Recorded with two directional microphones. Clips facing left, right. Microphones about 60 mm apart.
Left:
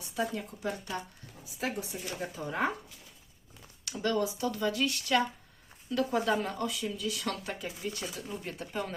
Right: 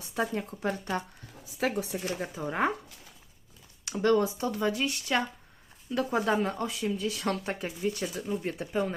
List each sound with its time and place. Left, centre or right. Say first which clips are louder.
0.3 s speech: right 4 dB; right
1.5 s speech: right 5 dB; right
2.2 s speech: right 2 dB; centre
3.8 s speech: right 6 dB; right
6.3 s speech: right 2 dB; right
8.7 s speech: right 6 dB; centre